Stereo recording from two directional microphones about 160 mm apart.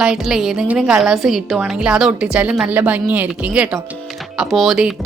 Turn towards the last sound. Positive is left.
turn(degrees=0)  # may be behind; listen again after turning